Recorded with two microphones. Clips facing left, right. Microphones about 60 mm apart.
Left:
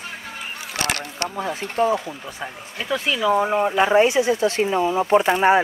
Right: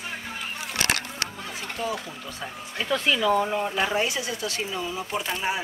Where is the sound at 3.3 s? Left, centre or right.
Left.